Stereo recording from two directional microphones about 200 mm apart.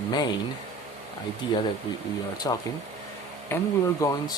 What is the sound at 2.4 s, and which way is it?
Speech, 20° left (ahead or behind).